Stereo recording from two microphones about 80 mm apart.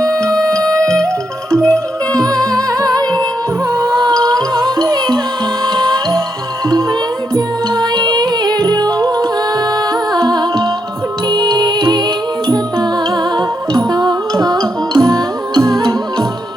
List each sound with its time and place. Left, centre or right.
0.1 s music: centre
1.0 s music: right
2.3 s music: centre
2.6 s music: right
7.3 s music: right